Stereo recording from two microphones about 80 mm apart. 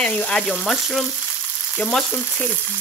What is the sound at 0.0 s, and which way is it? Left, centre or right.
Frying, centre.